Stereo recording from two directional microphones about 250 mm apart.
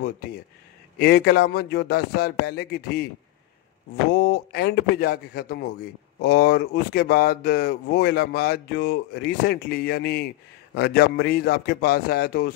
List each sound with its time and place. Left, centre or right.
0.9 s speech: left
4.1 s speech: left